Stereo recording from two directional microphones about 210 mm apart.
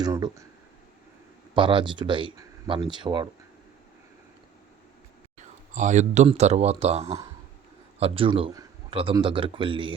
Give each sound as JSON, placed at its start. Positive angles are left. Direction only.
{"t": 0.0, "sound": "speech", "side_deg": -15}
{"t": 1.5, "sound": "a man's voice", "side_deg": -25}
{"t": 5.7, "sound": "a man's voice", "side_deg": -35}